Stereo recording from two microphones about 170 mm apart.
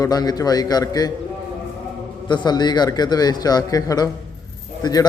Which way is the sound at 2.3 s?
25° left (ahead or behind).